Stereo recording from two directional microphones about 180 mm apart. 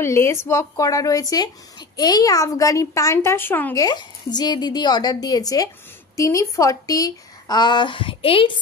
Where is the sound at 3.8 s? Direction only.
25° left (ahead or behind).